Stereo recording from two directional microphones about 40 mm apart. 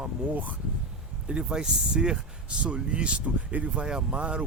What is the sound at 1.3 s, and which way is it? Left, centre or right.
Speech, right.